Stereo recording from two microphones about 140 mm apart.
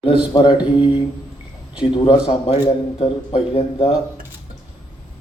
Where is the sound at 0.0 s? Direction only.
40° left (ahead or behind).